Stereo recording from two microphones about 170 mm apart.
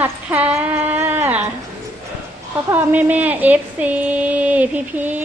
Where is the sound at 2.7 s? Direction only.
10° right (ahead or behind).